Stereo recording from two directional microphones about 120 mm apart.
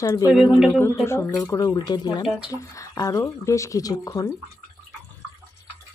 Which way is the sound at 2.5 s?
25° left (ahead or behind).